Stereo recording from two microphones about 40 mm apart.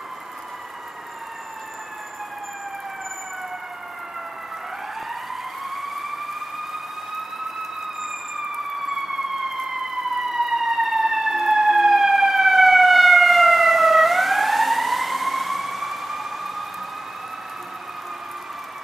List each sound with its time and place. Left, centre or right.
5.3 s emergency vehicle: centre
10.3 s siren: centre